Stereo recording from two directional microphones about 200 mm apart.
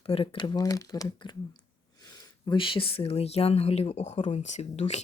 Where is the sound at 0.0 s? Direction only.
30° left (ahead or behind).